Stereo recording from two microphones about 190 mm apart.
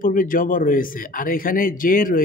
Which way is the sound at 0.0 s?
45° left (ahead or behind).